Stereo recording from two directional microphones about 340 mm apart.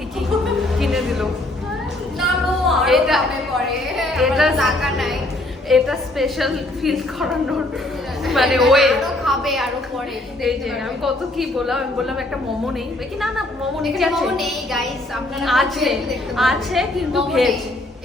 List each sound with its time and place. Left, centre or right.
0.4 s music: centre
2.2 s a sound: centre
3.8 s a woman's voice: centre
11.0 s a woman's voice: centre
13.8 s a woman's voice: centre